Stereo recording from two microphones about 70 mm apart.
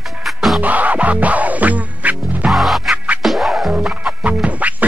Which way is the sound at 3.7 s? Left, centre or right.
Centre.